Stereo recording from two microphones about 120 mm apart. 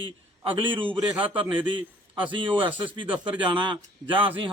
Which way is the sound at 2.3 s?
45° right (ahead or behind).